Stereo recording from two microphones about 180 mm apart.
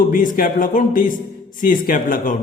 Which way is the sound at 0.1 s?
50° left (ahead or behind).